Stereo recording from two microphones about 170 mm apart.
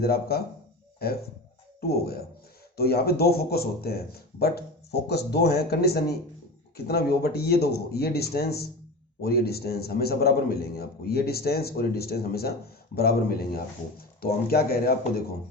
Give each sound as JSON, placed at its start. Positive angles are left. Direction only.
{"t": 0.0, "sound": "a man's voice", "side_deg": 65}